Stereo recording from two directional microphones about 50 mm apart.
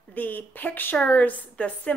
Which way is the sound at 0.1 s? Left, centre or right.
Left.